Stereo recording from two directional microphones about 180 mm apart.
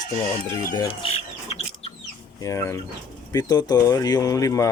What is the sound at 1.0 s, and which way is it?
Rodents, 30° left (ahead or behind).